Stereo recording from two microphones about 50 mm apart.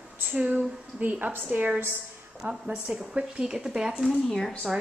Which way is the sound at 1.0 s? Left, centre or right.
Right.